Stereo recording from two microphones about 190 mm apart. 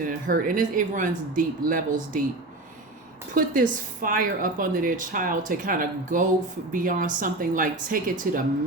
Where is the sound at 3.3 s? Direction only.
45° right (ahead or behind).